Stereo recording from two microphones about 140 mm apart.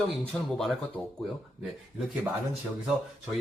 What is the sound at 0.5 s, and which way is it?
Speech, centre (ahead or behind).